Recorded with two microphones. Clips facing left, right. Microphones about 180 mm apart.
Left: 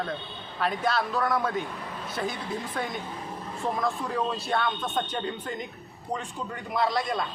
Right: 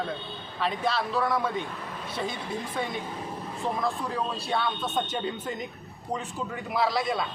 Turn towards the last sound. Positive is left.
turn(degrees=0)  # may be behind; listen again after turning